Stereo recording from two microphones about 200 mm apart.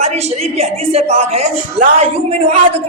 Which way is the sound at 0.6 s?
30° right (ahead or behind).